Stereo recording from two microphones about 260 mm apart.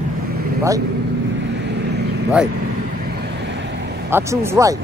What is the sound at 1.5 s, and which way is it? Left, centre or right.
Vehicle, right.